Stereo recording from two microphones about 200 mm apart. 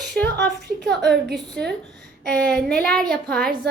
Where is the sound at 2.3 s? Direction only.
5° left (ahead or behind).